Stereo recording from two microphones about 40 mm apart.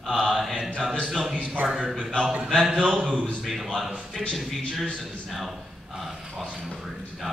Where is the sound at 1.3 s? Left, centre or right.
Right.